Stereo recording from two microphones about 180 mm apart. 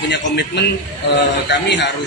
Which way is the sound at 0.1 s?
70° left (ahead or behind).